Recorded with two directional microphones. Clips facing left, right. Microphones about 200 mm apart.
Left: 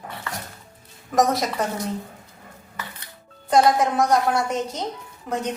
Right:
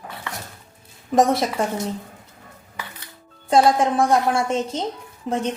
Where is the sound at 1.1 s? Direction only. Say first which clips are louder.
Right 3 dB; 30° right (ahead or behind).